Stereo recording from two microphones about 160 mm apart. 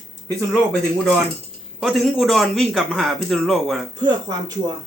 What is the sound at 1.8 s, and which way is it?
Speech, centre (ahead or behind).